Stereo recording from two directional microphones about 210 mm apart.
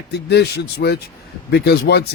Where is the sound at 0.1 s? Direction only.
50° left (ahead or behind).